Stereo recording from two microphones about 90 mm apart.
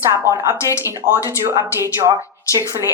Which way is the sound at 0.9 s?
30° right (ahead or behind).